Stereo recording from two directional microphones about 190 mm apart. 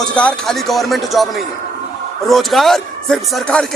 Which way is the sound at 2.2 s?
Centre (ahead or behind).